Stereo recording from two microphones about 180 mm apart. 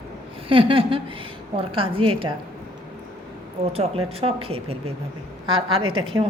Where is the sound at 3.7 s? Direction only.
35° right (ahead or behind).